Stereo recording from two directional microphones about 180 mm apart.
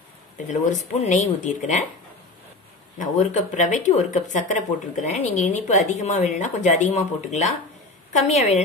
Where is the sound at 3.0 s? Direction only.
45° left (ahead or behind).